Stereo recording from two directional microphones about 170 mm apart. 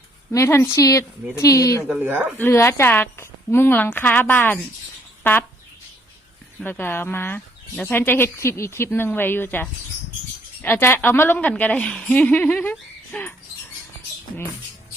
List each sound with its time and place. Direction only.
0.3 s speech: 15° left (ahead or behind)
1.9 s speech: 10° right (ahead or behind)
2.4 s speech: 15° left (ahead or behind)
6.7 s speech: 10° left (ahead or behind)